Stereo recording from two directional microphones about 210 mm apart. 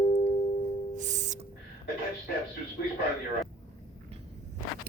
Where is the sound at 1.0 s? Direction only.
35° right (ahead or behind).